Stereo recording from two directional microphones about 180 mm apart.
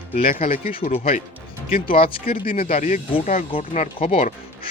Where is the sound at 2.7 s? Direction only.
45° left (ahead or behind).